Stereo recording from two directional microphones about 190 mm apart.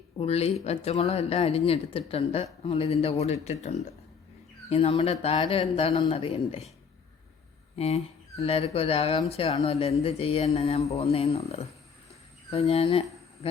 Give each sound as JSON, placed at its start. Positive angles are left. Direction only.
{"t": 0.2, "sound": "a woman's voice", "side_deg": 35}
{"t": 7.8, "sound": "a woman's voice", "side_deg": 35}